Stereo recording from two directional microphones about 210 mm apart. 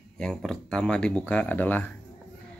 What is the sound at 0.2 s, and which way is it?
Speech, centre (ahead or behind).